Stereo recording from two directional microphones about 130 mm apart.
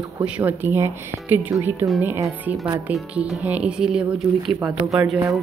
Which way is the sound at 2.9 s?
5° right (ahead or behind).